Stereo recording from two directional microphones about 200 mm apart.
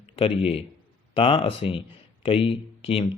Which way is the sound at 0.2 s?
25° left (ahead or behind).